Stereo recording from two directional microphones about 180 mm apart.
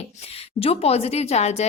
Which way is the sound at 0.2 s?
35° left (ahead or behind).